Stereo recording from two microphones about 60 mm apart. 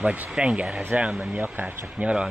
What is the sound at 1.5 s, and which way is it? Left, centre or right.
Speech, right.